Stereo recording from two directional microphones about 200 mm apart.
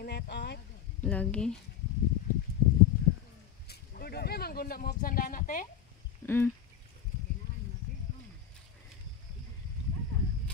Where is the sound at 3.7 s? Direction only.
50° left (ahead or behind).